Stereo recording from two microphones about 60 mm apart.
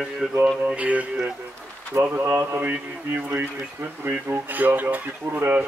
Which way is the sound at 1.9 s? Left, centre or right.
Right.